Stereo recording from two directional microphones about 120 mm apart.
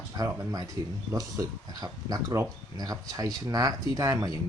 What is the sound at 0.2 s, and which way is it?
Speech, 30° right (ahead or behind).